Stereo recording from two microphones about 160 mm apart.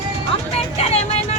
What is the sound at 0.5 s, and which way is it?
Speech, 40° left (ahead or behind).